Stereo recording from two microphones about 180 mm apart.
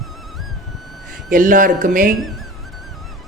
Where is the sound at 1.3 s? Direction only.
50° right (ahead or behind).